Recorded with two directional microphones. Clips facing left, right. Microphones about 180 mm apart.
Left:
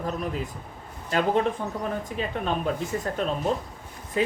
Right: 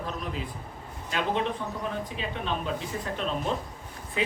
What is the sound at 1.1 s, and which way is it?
Speech, 45° left (ahead or behind).